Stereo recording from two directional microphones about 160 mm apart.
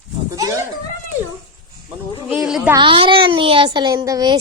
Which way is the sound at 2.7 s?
30° right (ahead or behind).